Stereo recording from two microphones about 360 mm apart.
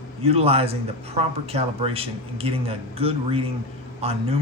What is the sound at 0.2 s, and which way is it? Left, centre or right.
A man's voice, centre.